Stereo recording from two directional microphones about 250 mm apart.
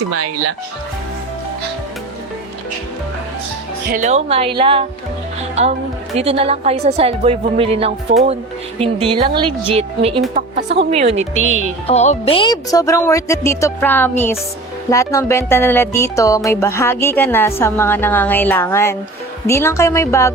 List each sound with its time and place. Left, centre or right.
3.9 s a woman's voice: right
6.1 s a woman's voice: right
10.3 s a woman's voice: right
10.9 s a woman's voice: right
11.9 s speech: left